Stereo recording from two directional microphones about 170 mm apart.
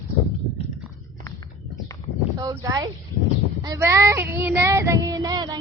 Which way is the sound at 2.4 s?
20° right (ahead or behind).